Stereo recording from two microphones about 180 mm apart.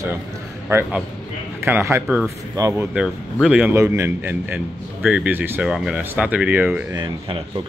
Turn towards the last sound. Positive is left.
turn(degrees=-25)  # may be behind; listen again after turning